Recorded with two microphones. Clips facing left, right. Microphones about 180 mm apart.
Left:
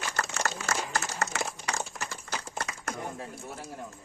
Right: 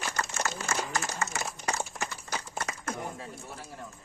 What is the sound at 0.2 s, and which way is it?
Crumpling, 65° left (ahead or behind).